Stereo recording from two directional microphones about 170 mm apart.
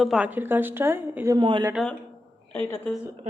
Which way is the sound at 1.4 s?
25° right (ahead or behind).